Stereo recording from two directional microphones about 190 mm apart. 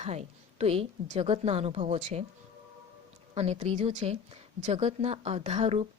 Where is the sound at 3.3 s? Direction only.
35° right (ahead or behind).